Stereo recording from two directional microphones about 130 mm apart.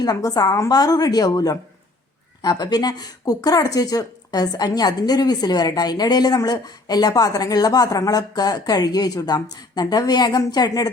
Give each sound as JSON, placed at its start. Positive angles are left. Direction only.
{"t": 0.0, "sound": "a woman's voice", "side_deg": 30}